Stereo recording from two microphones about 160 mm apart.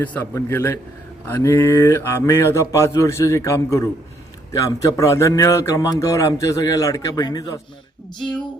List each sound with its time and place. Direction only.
0.0 s speech: 10° left (ahead or behind)